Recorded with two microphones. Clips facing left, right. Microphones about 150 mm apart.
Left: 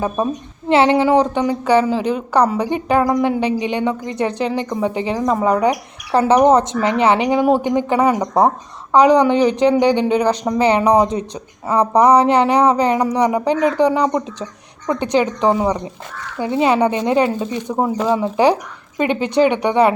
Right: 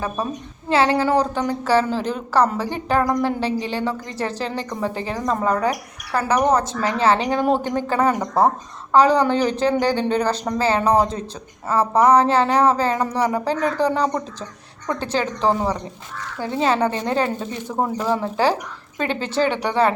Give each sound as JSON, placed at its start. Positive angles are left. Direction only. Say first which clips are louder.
{"t": 0.7, "sound": "speech", "louder": "left 5 dB", "side_deg": 20}